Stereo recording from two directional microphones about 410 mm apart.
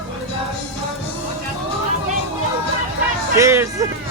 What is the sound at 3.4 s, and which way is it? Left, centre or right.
Speech, centre.